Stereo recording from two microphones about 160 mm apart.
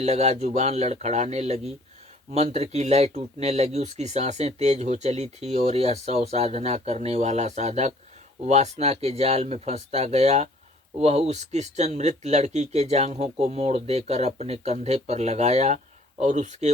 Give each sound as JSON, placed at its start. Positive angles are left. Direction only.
{"t": 0.0, "sound": "speech", "side_deg": -40}